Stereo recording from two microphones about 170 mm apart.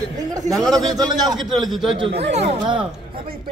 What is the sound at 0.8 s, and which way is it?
Speech, 25° right (ahead or behind).